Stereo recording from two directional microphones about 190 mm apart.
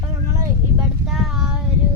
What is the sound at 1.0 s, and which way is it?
Speech, centre (ahead or behind).